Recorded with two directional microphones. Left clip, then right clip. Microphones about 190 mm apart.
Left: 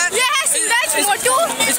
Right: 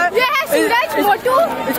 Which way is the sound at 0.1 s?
10° left (ahead or behind).